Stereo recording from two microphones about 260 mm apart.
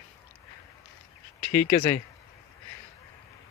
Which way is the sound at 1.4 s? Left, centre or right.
Centre.